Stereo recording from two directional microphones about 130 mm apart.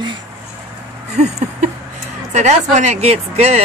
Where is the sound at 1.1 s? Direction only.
65° right (ahead or behind).